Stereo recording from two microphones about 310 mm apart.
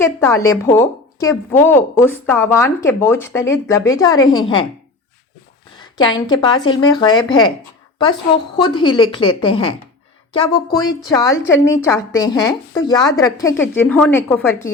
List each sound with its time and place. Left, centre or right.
0.0 s a woman's voice: centre
5.8 s a woman's voice: centre
8.6 s a woman's voice: centre